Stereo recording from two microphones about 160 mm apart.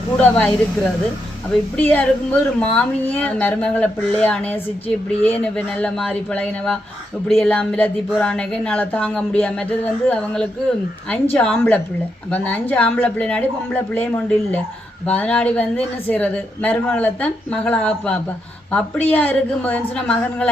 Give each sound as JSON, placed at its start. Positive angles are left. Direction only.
{"t": 0.2, "sound": "speech", "side_deg": 5}